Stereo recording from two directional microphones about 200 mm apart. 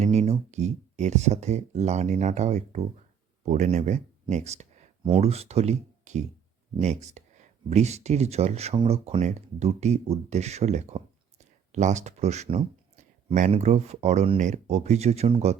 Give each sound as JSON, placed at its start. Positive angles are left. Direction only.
{"t": 0.0, "sound": "speech", "side_deg": -35}